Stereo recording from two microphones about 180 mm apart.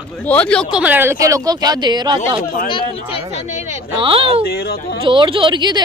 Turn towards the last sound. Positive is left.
turn(degrees=-25)  # may be behind; listen again after turning